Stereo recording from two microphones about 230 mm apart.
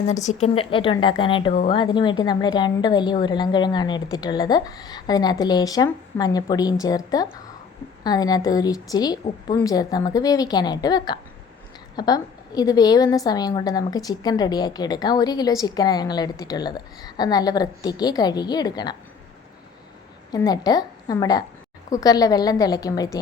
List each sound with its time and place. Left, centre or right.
0.2 s a woman's voice: left
20.3 s a woman's voice: centre